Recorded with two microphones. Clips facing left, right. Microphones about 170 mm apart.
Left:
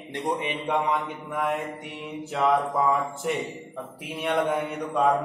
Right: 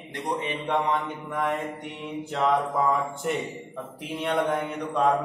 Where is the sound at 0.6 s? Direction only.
10° left (ahead or behind).